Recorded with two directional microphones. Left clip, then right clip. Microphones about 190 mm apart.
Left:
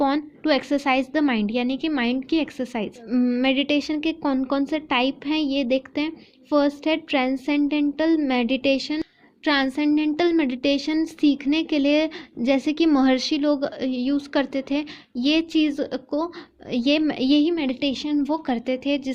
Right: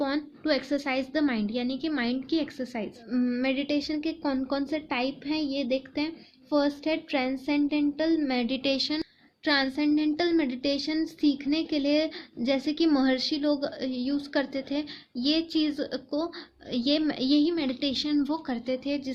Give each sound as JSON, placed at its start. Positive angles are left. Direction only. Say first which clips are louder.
{"t": 0.0, "sound": "a woman's voice", "louder": "left 7 dB", "side_deg": 35}
{"t": 8.5, "sound": "a woman's voice", "louder": "left 5 dB", "side_deg": 20}
{"t": 9.0, "sound": "a sound", "louder": "left 5 dB", "side_deg": 35}
{"t": 9.7, "sound": "a woman's voice", "louder": "left 4 dB", "side_deg": 30}
{"t": 18.4, "sound": "a woman's voice", "louder": "left 6 dB", "side_deg": 40}